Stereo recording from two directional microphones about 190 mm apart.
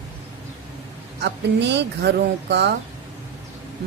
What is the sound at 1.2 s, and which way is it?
A woman's voice, 65° right (ahead or behind).